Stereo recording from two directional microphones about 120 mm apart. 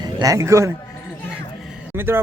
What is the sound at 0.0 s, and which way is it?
Speech, 30° right (ahead or behind).